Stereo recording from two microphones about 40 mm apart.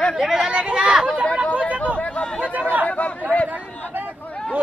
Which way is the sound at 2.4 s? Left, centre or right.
Right.